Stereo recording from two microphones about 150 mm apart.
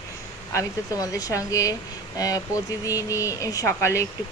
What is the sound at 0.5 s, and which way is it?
Speech, 25° left (ahead or behind).